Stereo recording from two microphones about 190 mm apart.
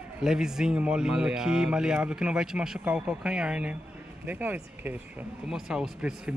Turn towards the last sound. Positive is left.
turn(degrees=-5)  # may be behind; listen again after turning